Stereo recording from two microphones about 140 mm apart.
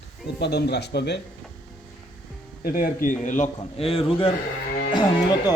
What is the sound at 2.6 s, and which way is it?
Speech, 90° left.